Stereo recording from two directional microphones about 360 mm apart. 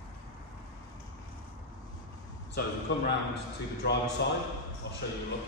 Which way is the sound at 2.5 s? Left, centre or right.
Left.